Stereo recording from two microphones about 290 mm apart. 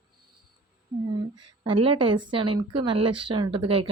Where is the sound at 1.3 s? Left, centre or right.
Centre.